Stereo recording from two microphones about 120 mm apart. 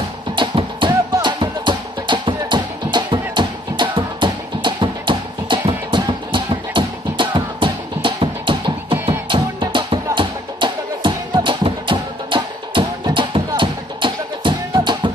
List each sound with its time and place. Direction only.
0.4 s music: 45° right (ahead or behind)